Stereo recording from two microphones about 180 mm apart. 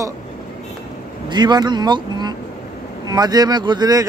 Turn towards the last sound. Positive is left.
turn(degrees=-20)  # may be behind; listen again after turning